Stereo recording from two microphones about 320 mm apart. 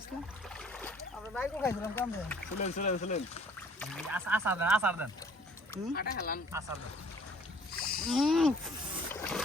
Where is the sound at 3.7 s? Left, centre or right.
Centre.